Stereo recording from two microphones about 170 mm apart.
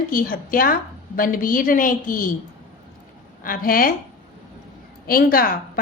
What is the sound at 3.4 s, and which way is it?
Speech, 55° left (ahead or behind).